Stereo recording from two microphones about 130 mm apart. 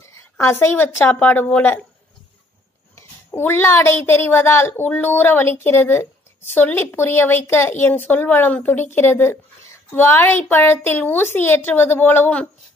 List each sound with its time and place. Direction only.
0.0 s a woman's voice: 20° left (ahead or behind)
3.0 s a child's voice: 15° left (ahead or behind)